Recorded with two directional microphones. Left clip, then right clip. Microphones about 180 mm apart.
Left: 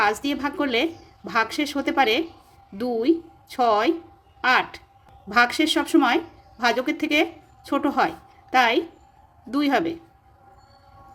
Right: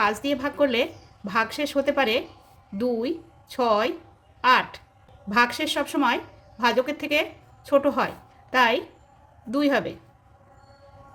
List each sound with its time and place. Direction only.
0.0 s a woman's voice: 15° left (ahead or behind)